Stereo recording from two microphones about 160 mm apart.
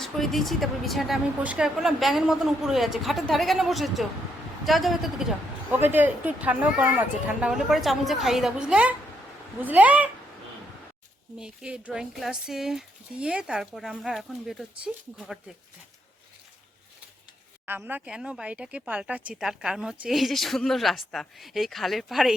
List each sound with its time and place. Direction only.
0.0 s speech: centre (ahead or behind)
5.7 s speech: 10° right (ahead or behind)
11.3 s speech: 5° right (ahead or behind)
17.7 s speech: 10° right (ahead or behind)